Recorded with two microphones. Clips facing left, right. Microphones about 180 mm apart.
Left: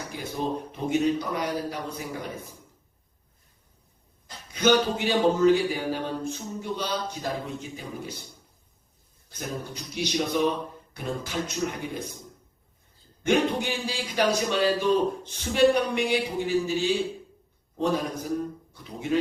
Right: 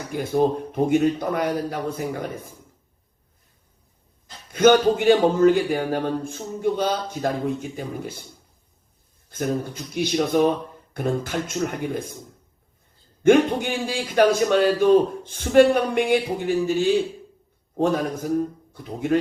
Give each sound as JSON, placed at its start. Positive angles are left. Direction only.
{"t": 0.1, "sound": "a man's voice", "side_deg": -50}
{"t": 4.5, "sound": "a man's voice", "side_deg": -50}
{"t": 9.3, "sound": "a man's voice", "side_deg": -50}
{"t": 13.2, "sound": "a man's voice", "side_deg": -50}